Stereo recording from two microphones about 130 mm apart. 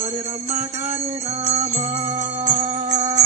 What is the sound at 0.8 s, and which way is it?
Music, 55° right (ahead or behind).